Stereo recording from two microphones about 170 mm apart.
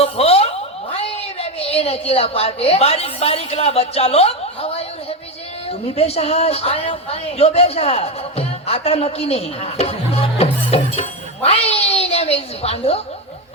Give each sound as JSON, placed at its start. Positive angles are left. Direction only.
{"t": 0.0, "sound": "a sound", "side_deg": 35}
{"t": 0.9, "sound": "a woman's voice", "side_deg": 35}
{"t": 6.0, "sound": "speech", "side_deg": 35}